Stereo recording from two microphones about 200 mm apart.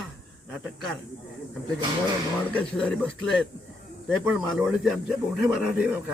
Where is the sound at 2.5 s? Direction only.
5° left (ahead or behind).